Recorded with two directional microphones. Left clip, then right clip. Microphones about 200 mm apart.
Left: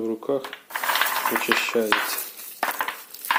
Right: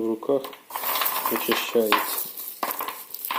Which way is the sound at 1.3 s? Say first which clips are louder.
Right 1 dB; centre (ahead or behind).